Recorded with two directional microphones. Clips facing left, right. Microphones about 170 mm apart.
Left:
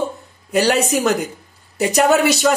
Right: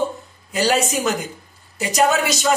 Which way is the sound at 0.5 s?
65° left (ahead or behind).